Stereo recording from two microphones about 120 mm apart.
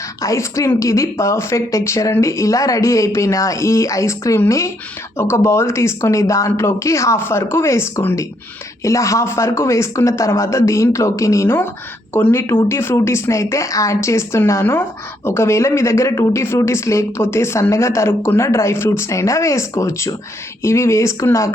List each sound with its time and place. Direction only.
0.2 s speech: 25° left (ahead or behind)